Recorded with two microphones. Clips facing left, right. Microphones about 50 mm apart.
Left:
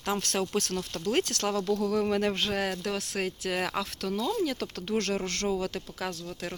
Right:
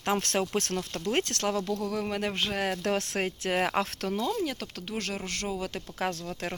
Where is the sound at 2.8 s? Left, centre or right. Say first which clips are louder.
Right 4 dB; right.